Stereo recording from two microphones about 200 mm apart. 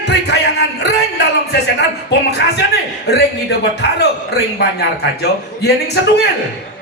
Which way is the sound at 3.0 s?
55° left (ahead or behind).